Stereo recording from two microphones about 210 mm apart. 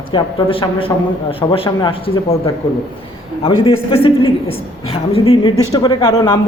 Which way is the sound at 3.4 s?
25° left (ahead or behind).